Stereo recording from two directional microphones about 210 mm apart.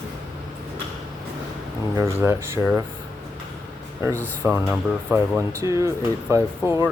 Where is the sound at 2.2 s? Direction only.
10° right (ahead or behind).